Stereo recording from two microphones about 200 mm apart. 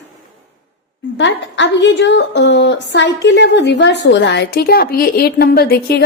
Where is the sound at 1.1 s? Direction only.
65° left (ahead or behind).